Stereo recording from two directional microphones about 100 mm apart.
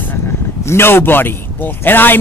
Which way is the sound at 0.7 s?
25° left (ahead or behind).